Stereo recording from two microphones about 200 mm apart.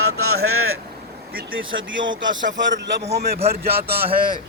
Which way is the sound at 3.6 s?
50° right (ahead or behind).